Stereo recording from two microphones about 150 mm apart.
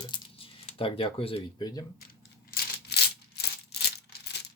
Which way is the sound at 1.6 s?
25° left (ahead or behind).